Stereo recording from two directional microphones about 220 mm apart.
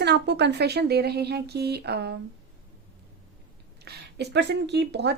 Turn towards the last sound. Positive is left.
turn(degrees=-50)  # may be behind; listen again after turning